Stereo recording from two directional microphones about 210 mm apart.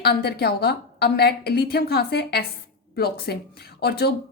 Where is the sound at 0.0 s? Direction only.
50° left (ahead or behind).